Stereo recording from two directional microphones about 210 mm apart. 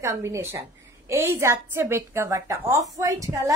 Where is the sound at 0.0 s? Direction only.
15° right (ahead or behind).